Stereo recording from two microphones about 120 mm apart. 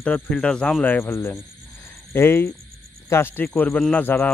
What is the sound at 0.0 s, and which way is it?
Speech, 10° left (ahead or behind).